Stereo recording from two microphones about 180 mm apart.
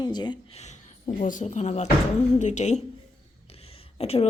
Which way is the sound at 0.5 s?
40° left (ahead or behind).